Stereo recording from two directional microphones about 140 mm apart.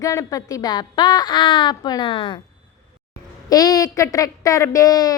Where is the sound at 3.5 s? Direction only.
25° left (ahead or behind).